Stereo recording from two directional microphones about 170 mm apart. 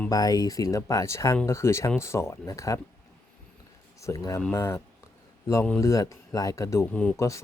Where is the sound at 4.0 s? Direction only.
20° left (ahead or behind).